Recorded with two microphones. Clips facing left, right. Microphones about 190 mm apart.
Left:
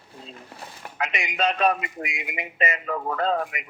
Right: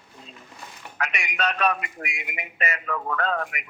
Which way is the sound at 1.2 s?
25° left (ahead or behind).